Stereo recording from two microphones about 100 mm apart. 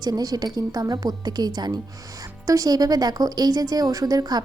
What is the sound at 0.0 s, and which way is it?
Speech, 40° right (ahead or behind).